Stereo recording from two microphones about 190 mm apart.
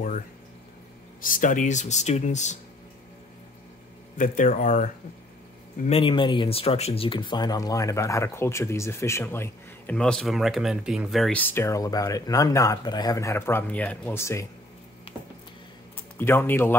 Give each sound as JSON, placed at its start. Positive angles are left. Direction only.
{"t": 1.2, "sound": "speech", "side_deg": 45}
{"t": 4.2, "sound": "speech", "side_deg": 45}
{"t": 5.9, "sound": "speech", "side_deg": 30}
{"t": 16.2, "sound": "speech", "side_deg": 10}